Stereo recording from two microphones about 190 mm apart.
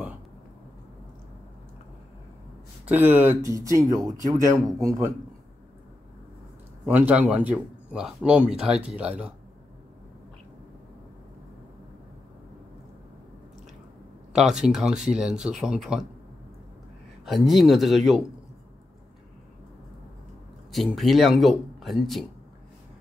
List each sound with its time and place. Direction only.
2.8 s speech: 10° right (ahead or behind)
6.9 s speech: 10° right (ahead or behind)
14.3 s speech: 5° right (ahead or behind)
17.2 s speech: centre (ahead or behind)
20.7 s speech: centre (ahead or behind)